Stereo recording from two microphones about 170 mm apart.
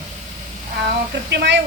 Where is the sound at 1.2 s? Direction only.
90° right.